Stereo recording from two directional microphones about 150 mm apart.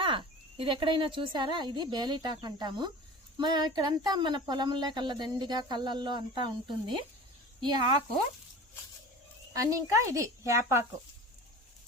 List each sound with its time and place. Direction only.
0.0 s speech: 35° right (ahead or behind)
9.5 s speech: 20° right (ahead or behind)